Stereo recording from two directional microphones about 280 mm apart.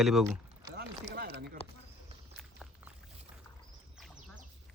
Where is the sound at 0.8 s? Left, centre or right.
Right.